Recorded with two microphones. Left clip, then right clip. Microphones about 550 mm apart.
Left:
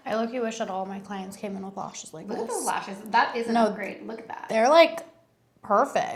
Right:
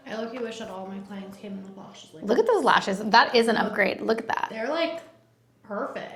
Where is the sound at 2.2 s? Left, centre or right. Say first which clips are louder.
Right 9 dB; right.